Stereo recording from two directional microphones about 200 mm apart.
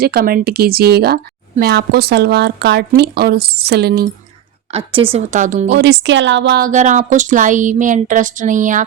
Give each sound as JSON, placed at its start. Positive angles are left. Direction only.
{"t": 0.0, "sound": "a woman's voice", "side_deg": -50}
{"t": 4.7, "sound": "speech", "side_deg": -30}
{"t": 5.7, "sound": "speech", "side_deg": -60}
{"t": 6.7, "sound": "speech", "side_deg": -40}